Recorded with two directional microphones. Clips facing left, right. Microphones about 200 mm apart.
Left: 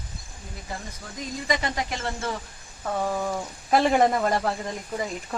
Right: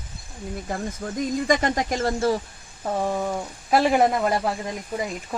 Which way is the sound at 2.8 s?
25° right (ahead or behind).